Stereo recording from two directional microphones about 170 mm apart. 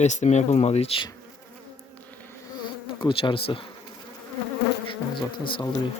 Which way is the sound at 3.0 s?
30° left (ahead or behind).